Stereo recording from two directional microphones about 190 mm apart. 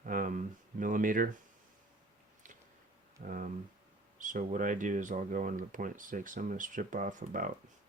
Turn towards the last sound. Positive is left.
turn(degrees=-45)  # may be behind; listen again after turning